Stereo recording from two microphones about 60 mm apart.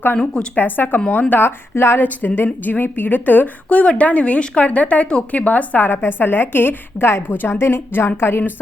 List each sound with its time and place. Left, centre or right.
0.5 s a woman's voice: left
2.0 s a woman's voice: left